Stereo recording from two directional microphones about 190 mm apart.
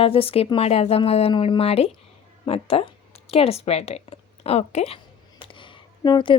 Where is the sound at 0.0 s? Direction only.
30° left (ahead or behind).